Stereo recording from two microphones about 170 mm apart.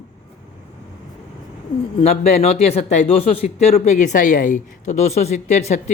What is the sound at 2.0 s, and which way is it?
Speech, 40° left (ahead or behind).